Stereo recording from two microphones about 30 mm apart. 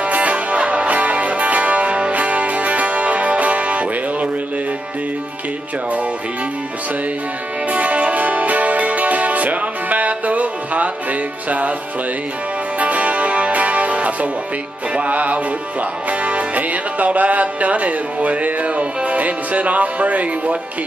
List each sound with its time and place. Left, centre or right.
0.0 s music: right
0.6 s music: right
0.8 s music: right
2.1 s music: right
7.7 s music: right
12.7 s music: right